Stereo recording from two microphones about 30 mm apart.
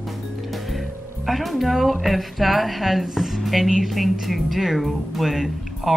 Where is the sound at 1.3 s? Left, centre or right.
Centre.